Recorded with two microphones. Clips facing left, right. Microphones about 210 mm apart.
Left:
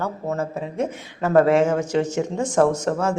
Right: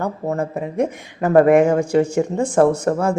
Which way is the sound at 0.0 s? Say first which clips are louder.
Right 3 dB; 15° right (ahead or behind).